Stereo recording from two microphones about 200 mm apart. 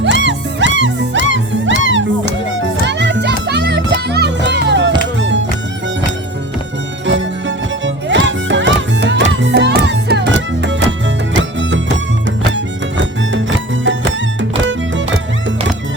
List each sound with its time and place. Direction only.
0.0 s music: 60° right (ahead or behind)
7.0 s music: 70° right (ahead or behind)
14.6 s music: 65° right (ahead or behind)